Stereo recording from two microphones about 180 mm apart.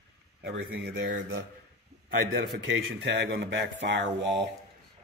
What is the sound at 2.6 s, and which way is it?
Speech, 85° right.